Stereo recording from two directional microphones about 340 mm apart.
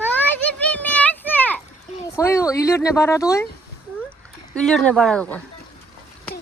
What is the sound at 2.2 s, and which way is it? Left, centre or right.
Speech, centre.